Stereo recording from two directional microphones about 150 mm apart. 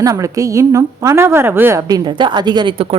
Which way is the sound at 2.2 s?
30° right (ahead or behind).